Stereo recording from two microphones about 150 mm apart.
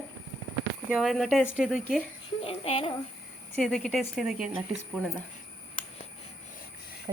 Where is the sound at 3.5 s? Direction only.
5° left (ahead or behind).